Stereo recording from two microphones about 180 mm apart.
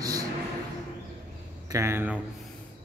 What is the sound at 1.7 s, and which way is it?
Speech, 15° right (ahead or behind).